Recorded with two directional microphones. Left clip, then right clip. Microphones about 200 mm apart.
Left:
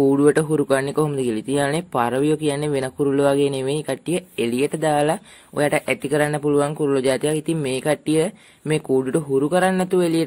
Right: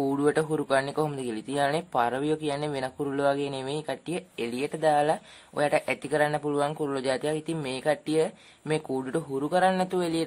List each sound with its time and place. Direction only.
0.0 s speech: 15° left (ahead or behind)